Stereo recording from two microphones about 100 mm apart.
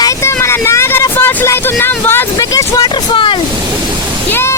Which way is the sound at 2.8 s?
60° left (ahead or behind).